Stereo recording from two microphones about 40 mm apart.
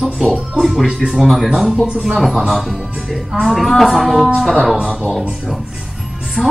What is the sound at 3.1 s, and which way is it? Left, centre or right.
Speech, centre.